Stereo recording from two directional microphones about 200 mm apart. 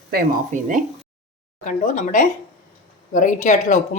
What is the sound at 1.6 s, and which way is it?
Speech, 40° left (ahead or behind).